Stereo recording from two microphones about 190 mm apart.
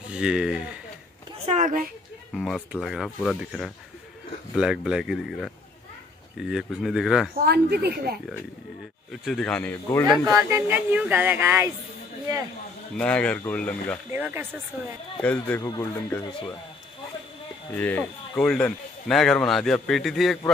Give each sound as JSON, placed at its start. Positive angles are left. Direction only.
{"t": 0.1, "sound": "speech", "side_deg": -5}
{"t": 1.4, "sound": "a woman's voice", "side_deg": -40}
{"t": 2.3, "sound": "speech", "side_deg": 0}
{"t": 6.5, "sound": "speech", "side_deg": 0}
{"t": 7.4, "sound": "speech", "side_deg": -60}
{"t": 9.1, "sound": "speech", "side_deg": 0}
{"t": 10.3, "sound": "speech", "side_deg": -10}
{"t": 12.9, "sound": "speech", "side_deg": 5}
{"t": 14.1, "sound": "speech", "side_deg": -10}
{"t": 15.2, "sound": "speech", "side_deg": 10}
{"t": 17.7, "sound": "speech", "side_deg": 10}